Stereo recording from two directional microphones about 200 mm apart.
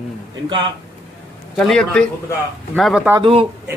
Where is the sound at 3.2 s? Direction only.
25° right (ahead or behind).